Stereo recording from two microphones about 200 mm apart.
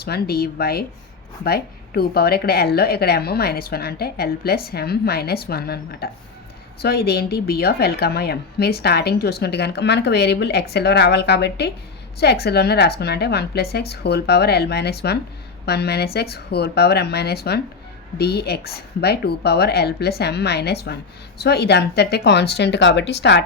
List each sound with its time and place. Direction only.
0.0 s a woman's voice: 50° left (ahead or behind)